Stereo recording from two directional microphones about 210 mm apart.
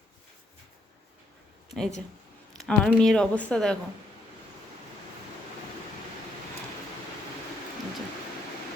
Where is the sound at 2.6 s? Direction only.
Centre (ahead or behind).